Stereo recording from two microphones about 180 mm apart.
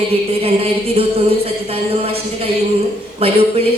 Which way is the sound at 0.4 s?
30° right (ahead or behind).